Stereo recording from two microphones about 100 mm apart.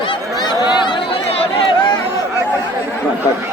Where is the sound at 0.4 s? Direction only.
50° left (ahead or behind).